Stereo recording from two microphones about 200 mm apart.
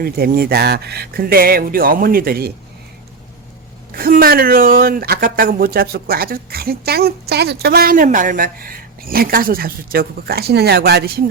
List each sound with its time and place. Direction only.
0.0 s speech: 50° right (ahead or behind)
3.9 s speech: 45° right (ahead or behind)